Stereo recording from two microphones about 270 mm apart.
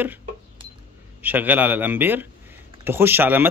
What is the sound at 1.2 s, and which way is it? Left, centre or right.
Speech, centre.